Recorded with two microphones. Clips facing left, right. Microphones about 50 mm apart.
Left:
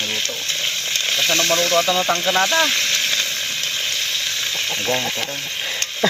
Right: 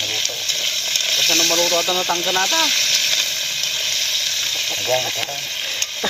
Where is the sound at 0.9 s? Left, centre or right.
Centre.